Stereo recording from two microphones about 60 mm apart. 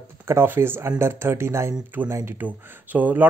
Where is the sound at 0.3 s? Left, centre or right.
Right.